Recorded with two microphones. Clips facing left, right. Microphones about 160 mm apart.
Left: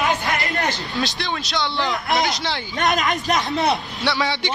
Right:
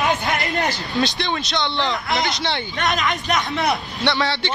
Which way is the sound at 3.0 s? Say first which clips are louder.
Left 1 dB; 40° left (ahead or behind).